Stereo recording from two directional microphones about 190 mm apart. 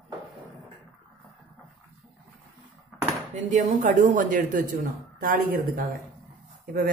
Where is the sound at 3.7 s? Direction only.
40° right (ahead or behind).